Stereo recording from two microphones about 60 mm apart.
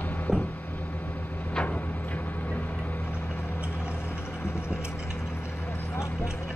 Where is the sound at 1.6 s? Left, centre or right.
Left.